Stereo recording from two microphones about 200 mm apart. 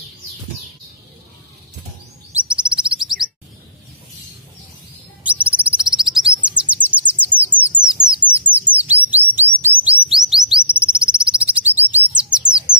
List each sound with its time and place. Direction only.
2.3 s chirp: 5° right (ahead or behind)
5.2 s bird: 5° right (ahead or behind)